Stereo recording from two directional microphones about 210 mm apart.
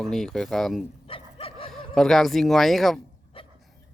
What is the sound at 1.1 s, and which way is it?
Dog, 25° left (ahead or behind).